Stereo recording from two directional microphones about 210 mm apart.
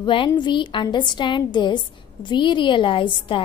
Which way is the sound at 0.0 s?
25° left (ahead or behind).